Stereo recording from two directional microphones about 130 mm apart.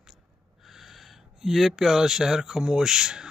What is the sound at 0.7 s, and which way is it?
Speech, centre (ahead or behind).